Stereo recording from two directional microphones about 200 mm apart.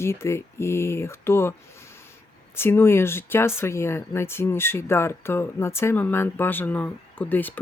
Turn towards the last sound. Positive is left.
turn(degrees=10)  # may be behind; listen again after turning